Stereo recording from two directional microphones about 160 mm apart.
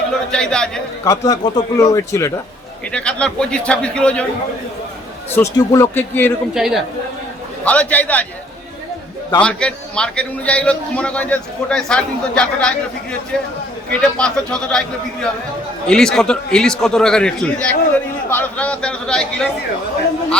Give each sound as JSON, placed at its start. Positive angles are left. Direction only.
{"t": 0.1, "sound": "speech", "side_deg": 5}
{"t": 1.3, "sound": "speech", "side_deg": 20}
{"t": 2.9, "sound": "a man's voice", "side_deg": 5}
{"t": 5.3, "sound": "a man's voice", "side_deg": 20}
{"t": 6.5, "sound": "a man's voice", "side_deg": -5}
{"t": 7.6, "sound": "a man's voice", "side_deg": 10}
{"t": 9.4, "sound": "a man's voice", "side_deg": 5}